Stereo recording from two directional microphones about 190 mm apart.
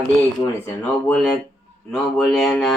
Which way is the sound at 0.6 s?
5° left (ahead or behind).